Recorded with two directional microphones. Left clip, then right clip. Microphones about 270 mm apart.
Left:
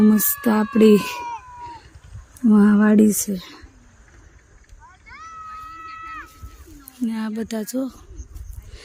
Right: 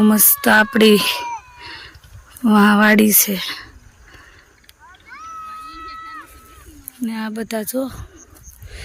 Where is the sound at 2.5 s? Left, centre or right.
Centre.